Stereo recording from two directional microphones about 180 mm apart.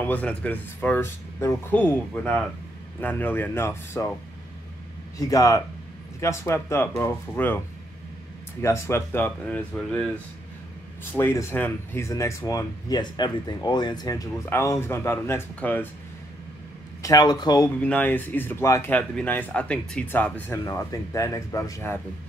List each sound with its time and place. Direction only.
0.0 s speech: 10° left (ahead or behind)
5.2 s speech: 20° left (ahead or behind)
17.0 s speech: 20° left (ahead or behind)
17.7 s speech: 5° left (ahead or behind)